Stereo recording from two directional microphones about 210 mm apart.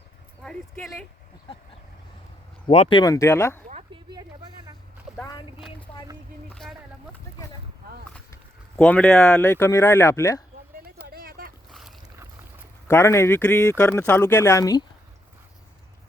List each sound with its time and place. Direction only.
0.4 s speech: centre (ahead or behind)
2.6 s speech: 30° left (ahead or behind)
3.0 s speech: 15° left (ahead or behind)
5.1 s a sound: 15° left (ahead or behind)
6.5 s a sound: centre (ahead or behind)
8.8 s speech: 10° left (ahead or behind)
11.0 s a sound: 45° right (ahead or behind)
11.7 s boat: centre (ahead or behind)
12.9 s speech: 10° left (ahead or behind)